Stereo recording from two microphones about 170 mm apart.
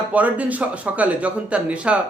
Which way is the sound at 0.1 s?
10° right (ahead or behind).